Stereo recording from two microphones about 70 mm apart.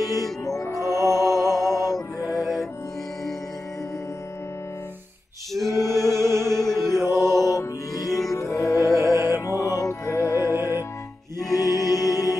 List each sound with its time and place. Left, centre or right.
0.0 s music: left
2.4 s music: centre
5.5 s a capella: centre
5.8 s music: left
6.4 s music: centre
7.4 s music: left
8.3 s music: left
9.1 s music: right
9.5 s music: left
10.4 s music: right
11.3 s music: left